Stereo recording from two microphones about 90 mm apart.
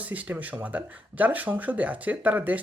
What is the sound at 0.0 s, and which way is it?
Speech, 15° right (ahead or behind).